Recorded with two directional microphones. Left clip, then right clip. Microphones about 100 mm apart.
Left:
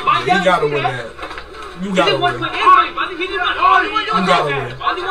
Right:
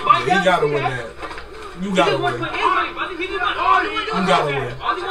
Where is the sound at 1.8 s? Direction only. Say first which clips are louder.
Left 2 dB; 5° left (ahead or behind).